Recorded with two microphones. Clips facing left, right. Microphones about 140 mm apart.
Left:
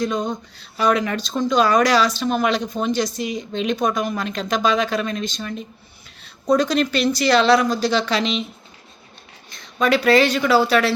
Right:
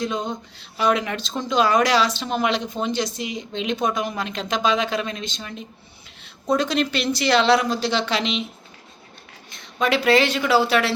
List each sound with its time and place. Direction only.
0.0 s speech: 25° right (ahead or behind)
9.7 s speech: 25° right (ahead or behind)